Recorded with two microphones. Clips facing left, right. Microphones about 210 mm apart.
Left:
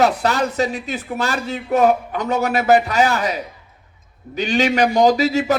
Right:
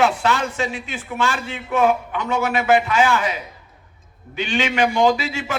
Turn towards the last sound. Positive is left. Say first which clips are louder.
# left 6 dB
turn(degrees=40)  # may be behind; listen again after turning